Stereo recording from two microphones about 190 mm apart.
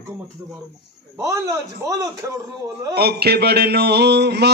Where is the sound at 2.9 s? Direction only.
55° right (ahead or behind).